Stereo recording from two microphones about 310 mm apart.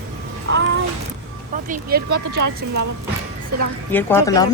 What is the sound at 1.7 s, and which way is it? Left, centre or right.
Speech, right.